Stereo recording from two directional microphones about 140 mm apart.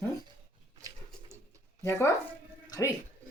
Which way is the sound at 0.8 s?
25° right (ahead or behind).